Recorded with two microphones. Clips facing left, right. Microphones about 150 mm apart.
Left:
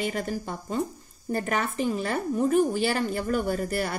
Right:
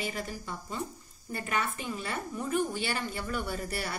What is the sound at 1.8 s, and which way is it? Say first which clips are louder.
A woman's voice: left 9 dB; 40° left (ahead or behind).